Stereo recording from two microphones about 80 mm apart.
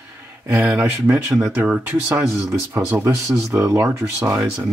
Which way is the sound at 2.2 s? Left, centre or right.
Right.